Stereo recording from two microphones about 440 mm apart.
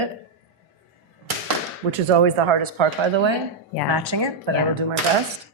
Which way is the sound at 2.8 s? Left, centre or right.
Right.